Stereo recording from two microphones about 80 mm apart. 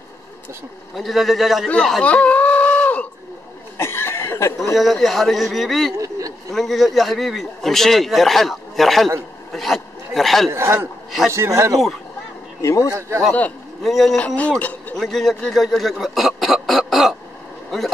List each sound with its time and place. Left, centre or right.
0.9 s a man's voice: centre
2.0 s a sound: centre
3.7 s chuckle: left
4.7 s a man's voice: centre
5.9 s a sound: right
6.5 s a man's voice: centre
10.5 s a man's voice: right
13.8 s a man's voice: centre
14.2 s speech: centre
14.6 s a sound: centre
15.0 s speech: centre